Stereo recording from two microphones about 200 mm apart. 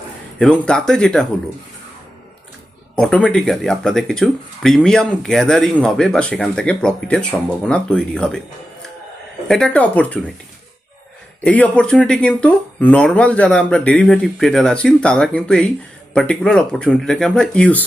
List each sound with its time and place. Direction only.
0.3 s speech: 5° left (ahead or behind)
2.9 s speech: 5° left (ahead or behind)
9.5 s speech: 5° left (ahead or behind)
11.4 s speech: 5° left (ahead or behind)